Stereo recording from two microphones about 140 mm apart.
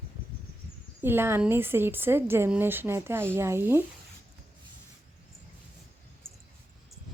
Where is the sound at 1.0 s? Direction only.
15° right (ahead or behind).